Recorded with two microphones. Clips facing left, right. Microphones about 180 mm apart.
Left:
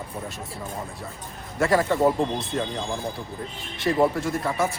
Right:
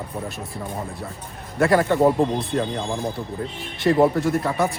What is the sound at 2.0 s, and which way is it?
Speech, 20° right (ahead or behind).